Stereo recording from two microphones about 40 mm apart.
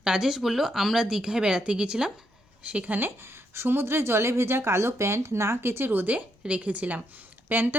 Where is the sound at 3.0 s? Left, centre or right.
Right.